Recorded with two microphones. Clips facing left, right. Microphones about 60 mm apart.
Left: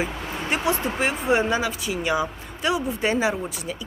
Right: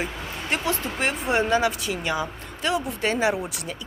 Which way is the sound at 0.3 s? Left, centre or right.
Centre.